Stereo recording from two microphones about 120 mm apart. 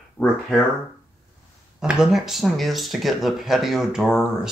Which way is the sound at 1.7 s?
5° right (ahead or behind).